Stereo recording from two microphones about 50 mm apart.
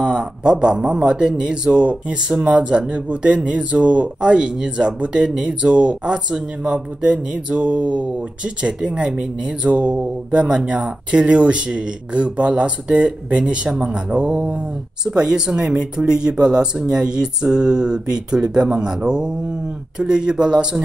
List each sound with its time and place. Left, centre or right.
0.0 s speech: centre